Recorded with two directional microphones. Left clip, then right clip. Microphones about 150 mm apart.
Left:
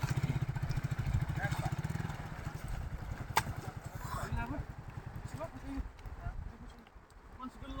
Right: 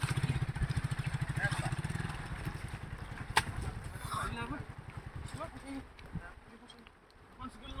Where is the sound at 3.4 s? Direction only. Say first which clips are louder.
Right 2 dB; 20° left (ahead or behind).